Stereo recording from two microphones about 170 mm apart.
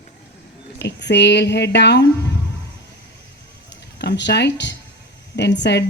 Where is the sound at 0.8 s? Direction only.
90° left.